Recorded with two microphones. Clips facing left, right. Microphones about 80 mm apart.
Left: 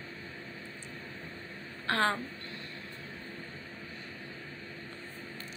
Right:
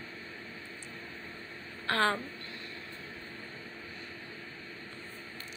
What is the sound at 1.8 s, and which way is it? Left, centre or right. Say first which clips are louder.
Speech: even; left.